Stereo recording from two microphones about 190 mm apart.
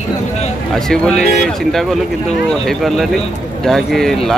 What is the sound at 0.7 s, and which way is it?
Speech, 5° left (ahead or behind).